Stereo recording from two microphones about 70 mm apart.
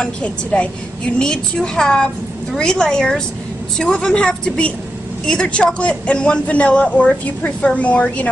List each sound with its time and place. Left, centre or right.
0.0 s a man's voice: centre